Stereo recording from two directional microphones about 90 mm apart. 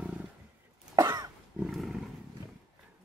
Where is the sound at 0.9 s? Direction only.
45° right (ahead or behind).